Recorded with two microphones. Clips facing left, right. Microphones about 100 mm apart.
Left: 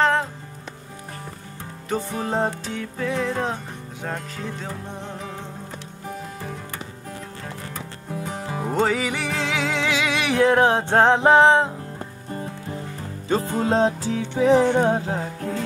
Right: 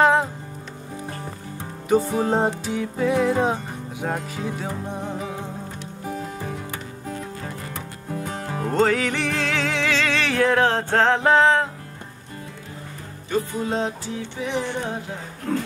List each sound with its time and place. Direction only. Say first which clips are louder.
0.0 s music: right 3 dB; 10° right (ahead or behind)
1.9 s music: right 6 dB; 10° right (ahead or behind)
7.7 s music: right 1 dB; centre (ahead or behind); by 11.7 s 20° left (ahead or behind)
13.3 s music: left 3 dB; 35° left (ahead or behind)